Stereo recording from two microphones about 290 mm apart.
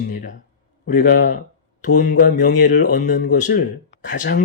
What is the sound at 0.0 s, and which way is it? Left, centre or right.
Speech, left.